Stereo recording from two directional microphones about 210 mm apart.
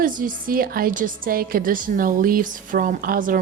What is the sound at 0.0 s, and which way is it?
A woman's voice, 40° right (ahead or behind).